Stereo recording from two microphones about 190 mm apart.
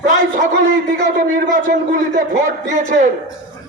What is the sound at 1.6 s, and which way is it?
A man's voice, 45° right (ahead or behind).